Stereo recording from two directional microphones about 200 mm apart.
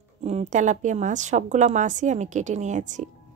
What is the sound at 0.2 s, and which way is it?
A woman's voice, 35° right (ahead or behind).